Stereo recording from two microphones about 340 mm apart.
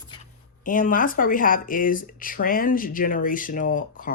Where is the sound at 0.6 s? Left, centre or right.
Left.